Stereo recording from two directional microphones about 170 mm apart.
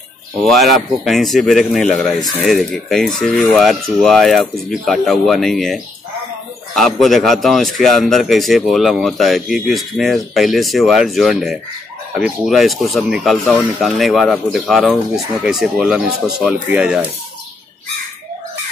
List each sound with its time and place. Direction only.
0.4 s a man's voice: centre (ahead or behind)